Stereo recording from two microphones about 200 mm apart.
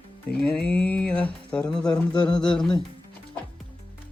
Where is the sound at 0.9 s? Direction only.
5° left (ahead or behind).